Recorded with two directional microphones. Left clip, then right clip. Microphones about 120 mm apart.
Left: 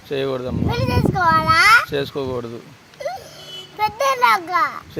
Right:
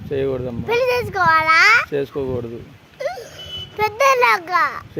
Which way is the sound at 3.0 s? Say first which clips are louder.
Right 2 dB; 25° right (ahead or behind).